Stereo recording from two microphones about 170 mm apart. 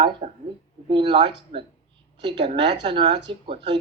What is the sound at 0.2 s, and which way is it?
Speech, 45° right (ahead or behind).